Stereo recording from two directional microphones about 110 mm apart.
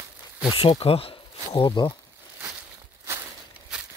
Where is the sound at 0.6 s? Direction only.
60° left (ahead or behind).